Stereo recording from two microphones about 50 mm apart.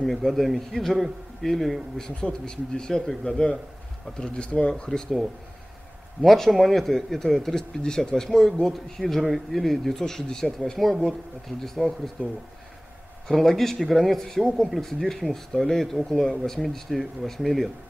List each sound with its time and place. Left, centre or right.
0.0 s a man's voice: centre
2.0 s a man's voice: centre
6.2 s a man's voice: centre
13.3 s a man's voice: centre